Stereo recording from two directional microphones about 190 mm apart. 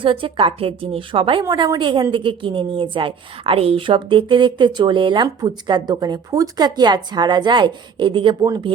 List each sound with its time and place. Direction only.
0.0 s a woman's voice: 25° right (ahead or behind)